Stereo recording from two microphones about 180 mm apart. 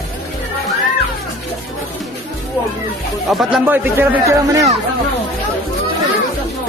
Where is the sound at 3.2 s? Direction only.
Centre (ahead or behind).